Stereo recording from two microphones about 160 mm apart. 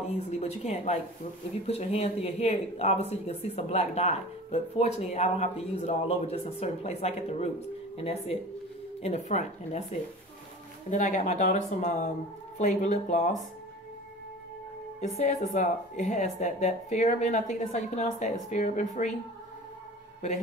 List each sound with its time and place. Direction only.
0.3 s speech: 40° left (ahead or behind)
15.0 s speech: 45° left (ahead or behind)